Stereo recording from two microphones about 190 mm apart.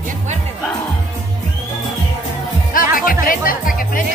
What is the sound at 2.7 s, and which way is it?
Music, 45° left (ahead or behind).